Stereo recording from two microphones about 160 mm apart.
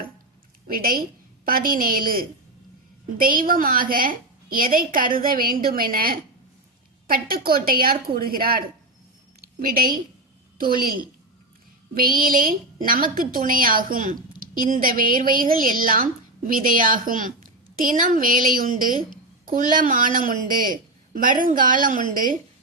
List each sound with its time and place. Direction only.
0.7 s a woman's voice: 65° right (ahead or behind)